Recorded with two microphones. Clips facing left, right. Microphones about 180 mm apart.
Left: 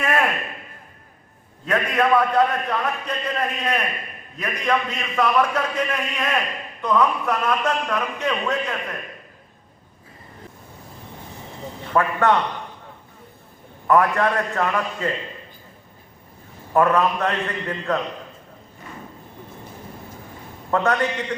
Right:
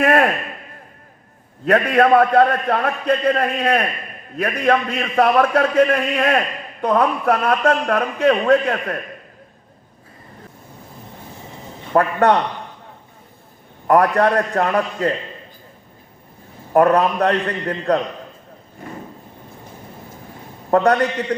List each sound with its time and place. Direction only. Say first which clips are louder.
0.0 s a sound: right 7 dB; 40° right (ahead or behind)
2.0 s a man's voice: right 3 dB; 55° right (ahead or behind)
11.9 s a man's voice: right 4 dB; 35° right (ahead or behind)
13.8 s a man's voice: right 4 dB; 35° right (ahead or behind)
16.7 s a man's voice: right 4 dB; 35° right (ahead or behind)
20.7 s a man's voice: right 5 dB; 35° right (ahead or behind)